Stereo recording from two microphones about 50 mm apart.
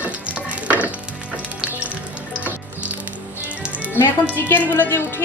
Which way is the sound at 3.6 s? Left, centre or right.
Right.